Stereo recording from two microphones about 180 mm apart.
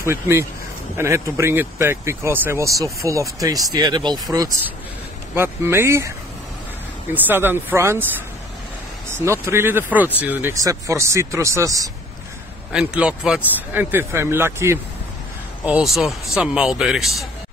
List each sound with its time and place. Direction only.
0.0 s speech: 15° right (ahead or behind)
9.1 s speech: 15° right (ahead or behind)
12.7 s speech: 5° right (ahead or behind)
15.6 s speech: 5° right (ahead or behind)